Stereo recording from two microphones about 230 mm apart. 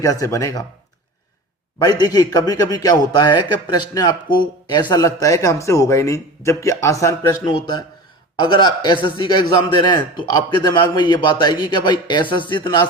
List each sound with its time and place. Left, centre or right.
0.0 s speech: centre
1.8 s speech: centre
8.5 s a man's voice: centre